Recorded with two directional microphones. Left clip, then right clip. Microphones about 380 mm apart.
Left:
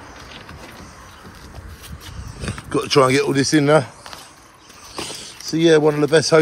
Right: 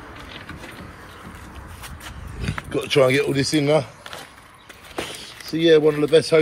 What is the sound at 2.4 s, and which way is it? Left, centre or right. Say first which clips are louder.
Speech: left 3 dB; centre.